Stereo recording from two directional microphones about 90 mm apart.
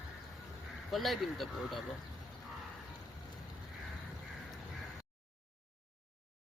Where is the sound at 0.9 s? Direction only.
Centre (ahead or behind).